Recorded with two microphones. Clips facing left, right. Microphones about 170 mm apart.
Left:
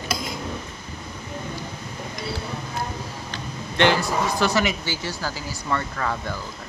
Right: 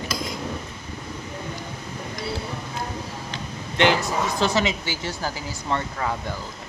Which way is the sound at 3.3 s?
15° right (ahead or behind).